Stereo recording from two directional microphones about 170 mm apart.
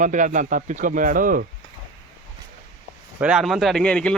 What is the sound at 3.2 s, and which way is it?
Speech, 5° right (ahead or behind).